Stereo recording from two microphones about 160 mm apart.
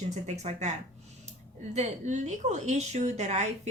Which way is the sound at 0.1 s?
45° right (ahead or behind).